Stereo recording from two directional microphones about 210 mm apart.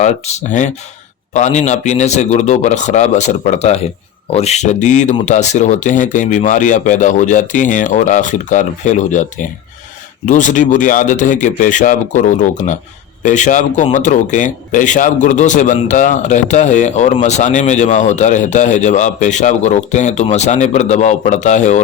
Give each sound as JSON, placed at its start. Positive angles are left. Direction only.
{"t": 0.0, "sound": "speech", "side_deg": 35}